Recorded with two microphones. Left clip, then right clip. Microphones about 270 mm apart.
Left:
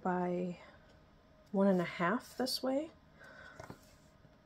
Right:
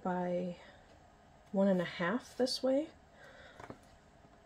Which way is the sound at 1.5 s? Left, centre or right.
Centre.